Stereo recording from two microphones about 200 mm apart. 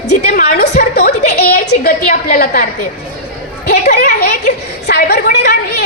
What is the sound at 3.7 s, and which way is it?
A child's voice, 55° left (ahead or behind).